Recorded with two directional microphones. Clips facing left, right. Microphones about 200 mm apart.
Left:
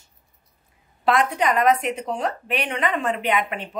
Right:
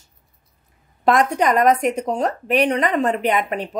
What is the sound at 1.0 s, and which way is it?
A woman's voice, 45° right (ahead or behind).